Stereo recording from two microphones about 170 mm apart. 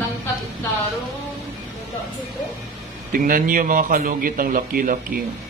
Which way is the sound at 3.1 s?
55° right (ahead or behind).